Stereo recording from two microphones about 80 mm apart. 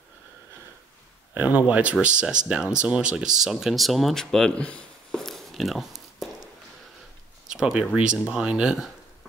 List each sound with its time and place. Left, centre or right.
1.3 s speech: right; by 6.2 s centre
7.5 s speech: centre